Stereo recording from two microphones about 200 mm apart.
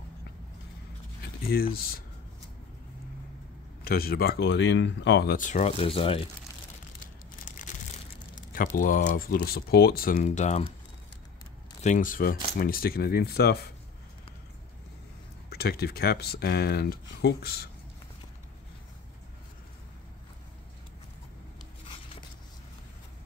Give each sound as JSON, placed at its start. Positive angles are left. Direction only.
{"t": 1.5, "sound": "speech", "side_deg": 50}
{"t": 3.8, "sound": "speech", "side_deg": 50}
{"t": 5.4, "sound": "speech", "side_deg": 35}
{"t": 7.0, "sound": "crumpling", "side_deg": 40}
{"t": 8.5, "sound": "speech", "side_deg": 45}
{"t": 11.8, "sound": "speech", "side_deg": 40}
{"t": 15.5, "sound": "speech", "side_deg": 50}
{"t": 21.8, "sound": "a sound", "side_deg": 25}